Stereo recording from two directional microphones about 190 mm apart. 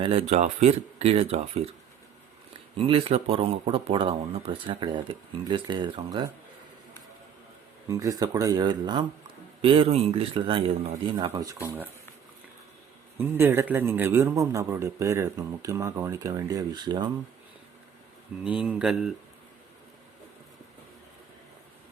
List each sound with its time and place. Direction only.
0.0 s speech: 30° right (ahead or behind)
2.7 s speech: 30° right (ahead or behind)
7.9 s speech: 20° right (ahead or behind)
11.3 s a man's voice: 15° right (ahead or behind)
13.1 s a man's voice: 10° right (ahead or behind)
18.4 s speech: 5° right (ahead or behind)